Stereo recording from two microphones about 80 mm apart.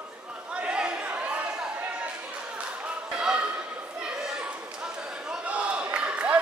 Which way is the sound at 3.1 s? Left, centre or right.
Centre.